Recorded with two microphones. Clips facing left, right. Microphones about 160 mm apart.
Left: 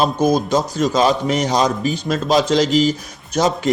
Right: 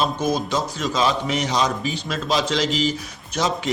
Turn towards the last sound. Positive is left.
turn(degrees=45)  # may be behind; listen again after turning